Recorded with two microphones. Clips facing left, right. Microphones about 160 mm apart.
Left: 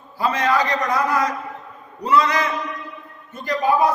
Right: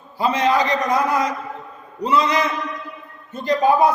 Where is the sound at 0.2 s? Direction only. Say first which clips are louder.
Right 2 dB; 20° right (ahead or behind).